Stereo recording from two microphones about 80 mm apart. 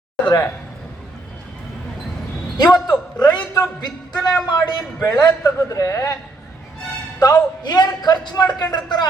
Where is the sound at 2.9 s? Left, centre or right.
Centre.